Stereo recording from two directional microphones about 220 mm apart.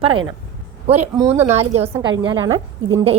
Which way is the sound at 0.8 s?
30° right (ahead or behind).